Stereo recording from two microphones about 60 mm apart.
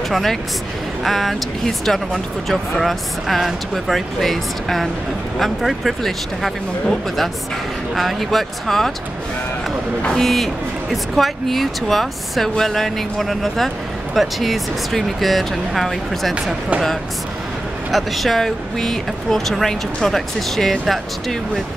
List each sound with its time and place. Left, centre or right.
0.1 s speech: centre
10.0 s speech: centre
17.9 s speech: centre